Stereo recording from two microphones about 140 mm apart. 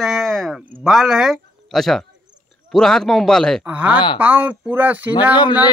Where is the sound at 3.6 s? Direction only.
10° right (ahead or behind).